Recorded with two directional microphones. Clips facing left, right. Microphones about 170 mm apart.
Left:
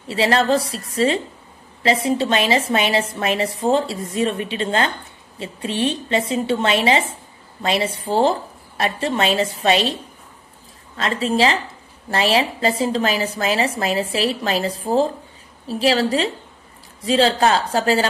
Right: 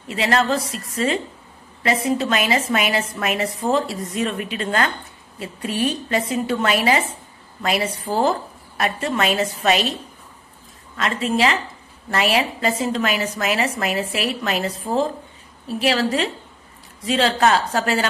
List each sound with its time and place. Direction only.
0.1 s a woman's voice: 30° left (ahead or behind)
11.0 s a woman's voice: 30° left (ahead or behind)